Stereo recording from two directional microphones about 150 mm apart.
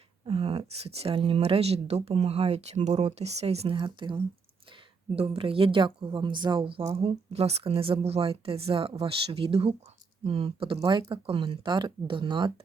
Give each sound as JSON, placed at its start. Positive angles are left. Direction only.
{"t": 0.3, "sound": "speech", "side_deg": -40}
{"t": 10.8, "sound": "speech", "side_deg": -25}